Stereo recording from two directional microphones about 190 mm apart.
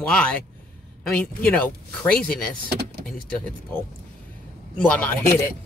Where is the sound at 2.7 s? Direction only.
55° right (ahead or behind).